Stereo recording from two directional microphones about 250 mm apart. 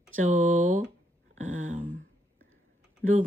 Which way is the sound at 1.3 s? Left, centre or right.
Right.